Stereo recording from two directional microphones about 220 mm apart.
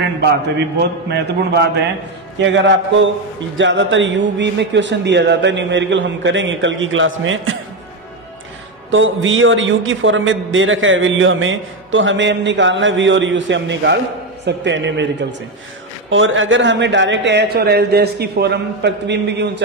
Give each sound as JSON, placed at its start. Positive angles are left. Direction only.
{"t": 0.3, "sound": "a man's voice", "side_deg": -50}
{"t": 8.9, "sound": "a man's voice", "side_deg": -60}
{"t": 16.1, "sound": "a man's voice", "side_deg": -60}